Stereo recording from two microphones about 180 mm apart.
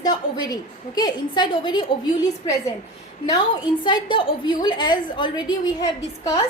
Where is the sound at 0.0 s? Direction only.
20° left (ahead or behind).